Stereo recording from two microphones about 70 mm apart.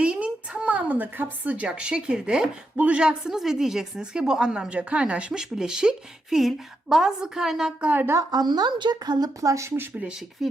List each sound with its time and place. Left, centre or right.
0.0 s a woman's voice: centre
7.8 s speech: right
8.3 s speech: right
10.4 s speech: centre